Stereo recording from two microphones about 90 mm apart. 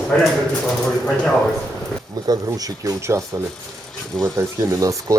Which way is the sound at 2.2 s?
45° right (ahead or behind).